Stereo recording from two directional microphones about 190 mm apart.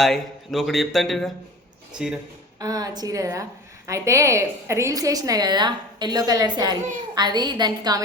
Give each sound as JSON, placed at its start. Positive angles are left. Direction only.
{"t": 0.0, "sound": "speech", "side_deg": 0}
{"t": 2.6, "sound": "a woman's voice", "side_deg": -20}